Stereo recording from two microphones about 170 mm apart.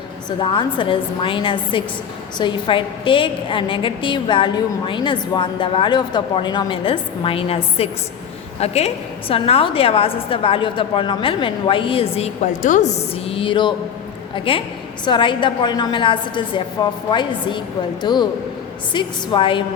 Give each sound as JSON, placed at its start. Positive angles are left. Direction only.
{"t": 0.3, "sound": "a woman's voice", "side_deg": 30}